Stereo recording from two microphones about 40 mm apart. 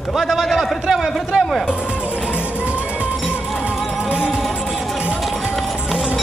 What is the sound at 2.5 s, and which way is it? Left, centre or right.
Music, right.